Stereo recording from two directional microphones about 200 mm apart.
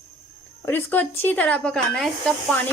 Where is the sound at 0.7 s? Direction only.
10° left (ahead or behind).